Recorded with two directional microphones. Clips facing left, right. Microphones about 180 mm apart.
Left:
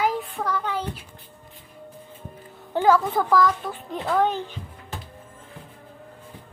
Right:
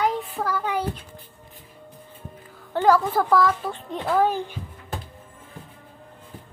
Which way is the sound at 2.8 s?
Centre (ahead or behind).